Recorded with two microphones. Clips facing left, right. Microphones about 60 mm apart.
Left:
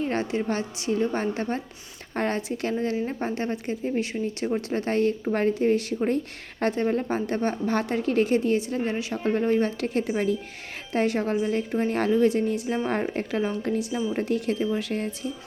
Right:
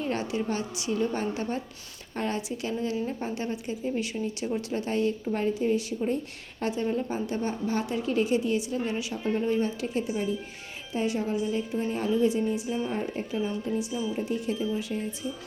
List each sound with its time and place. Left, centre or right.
0.0 s a woman's voice: left